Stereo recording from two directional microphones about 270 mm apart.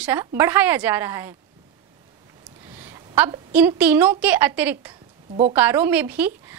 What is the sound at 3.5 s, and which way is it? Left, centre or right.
A woman's voice, centre.